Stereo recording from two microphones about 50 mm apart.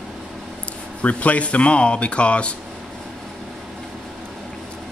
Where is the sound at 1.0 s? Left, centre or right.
Left.